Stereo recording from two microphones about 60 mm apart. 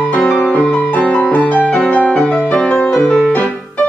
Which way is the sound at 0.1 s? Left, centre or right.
Left.